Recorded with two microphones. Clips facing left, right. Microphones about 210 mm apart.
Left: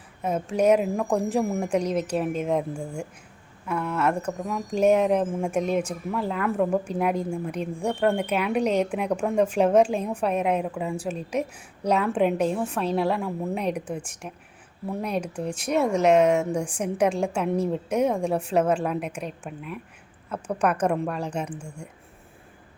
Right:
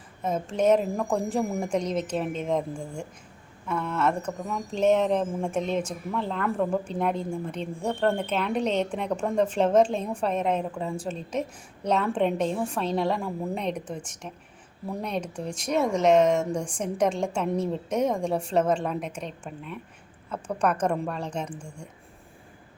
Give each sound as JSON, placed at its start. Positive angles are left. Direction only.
{"t": 0.2, "sound": "speech", "side_deg": 10}